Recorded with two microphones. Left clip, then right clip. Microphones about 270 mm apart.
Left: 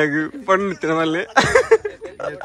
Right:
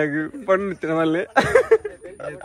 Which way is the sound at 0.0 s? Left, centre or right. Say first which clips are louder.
Left 4 dB; centre.